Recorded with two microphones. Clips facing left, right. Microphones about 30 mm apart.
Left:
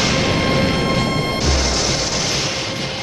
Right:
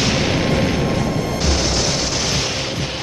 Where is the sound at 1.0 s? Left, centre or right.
Left.